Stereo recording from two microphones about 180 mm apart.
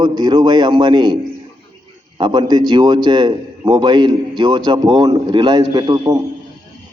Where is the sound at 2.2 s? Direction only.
25° right (ahead or behind).